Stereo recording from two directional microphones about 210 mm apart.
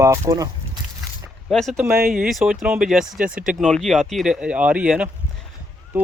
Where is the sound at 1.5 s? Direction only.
Centre (ahead or behind).